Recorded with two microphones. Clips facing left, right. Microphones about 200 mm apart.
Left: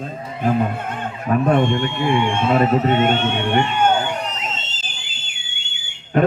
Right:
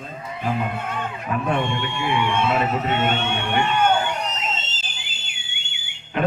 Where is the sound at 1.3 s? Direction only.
45° left (ahead or behind).